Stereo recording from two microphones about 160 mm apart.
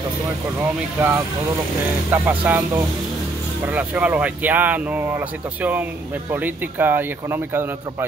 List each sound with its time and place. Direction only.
0.6 s speech: 15° right (ahead or behind)